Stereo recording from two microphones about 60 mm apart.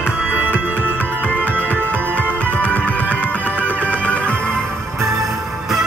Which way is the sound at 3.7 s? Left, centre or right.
Right.